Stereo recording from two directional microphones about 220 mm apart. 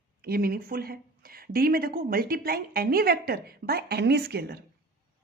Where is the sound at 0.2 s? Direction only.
45° right (ahead or behind).